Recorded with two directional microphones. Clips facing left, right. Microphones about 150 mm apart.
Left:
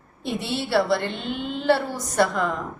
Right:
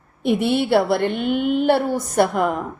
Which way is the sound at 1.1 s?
55° right (ahead or behind).